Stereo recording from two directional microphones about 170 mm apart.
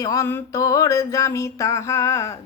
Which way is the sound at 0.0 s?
20° left (ahead or behind).